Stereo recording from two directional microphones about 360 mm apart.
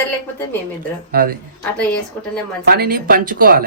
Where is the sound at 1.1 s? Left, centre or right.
Right.